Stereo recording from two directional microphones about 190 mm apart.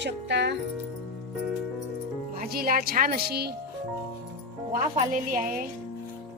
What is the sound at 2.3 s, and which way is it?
Speech, 50° right (ahead or behind).